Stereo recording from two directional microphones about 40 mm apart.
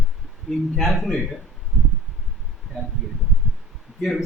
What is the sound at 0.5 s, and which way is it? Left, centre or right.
Speech, centre.